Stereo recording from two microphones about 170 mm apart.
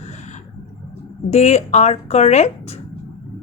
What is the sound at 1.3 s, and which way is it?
A woman's voice, 40° left (ahead or behind).